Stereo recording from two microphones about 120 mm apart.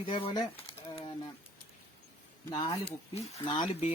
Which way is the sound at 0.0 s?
50° left (ahead or behind).